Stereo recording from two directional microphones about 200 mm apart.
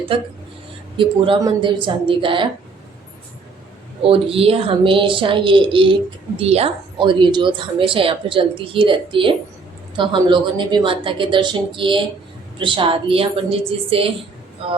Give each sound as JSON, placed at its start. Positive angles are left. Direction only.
{"t": 0.1, "sound": "a woman's voice", "side_deg": -25}
{"t": 4.0, "sound": "a woman's voice", "side_deg": -25}